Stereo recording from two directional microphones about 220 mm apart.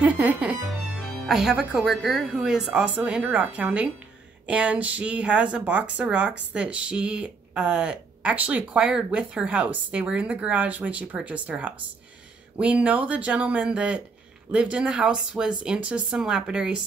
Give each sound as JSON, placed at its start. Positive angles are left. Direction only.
{"t": 0.0, "sound": "speech", "side_deg": -5}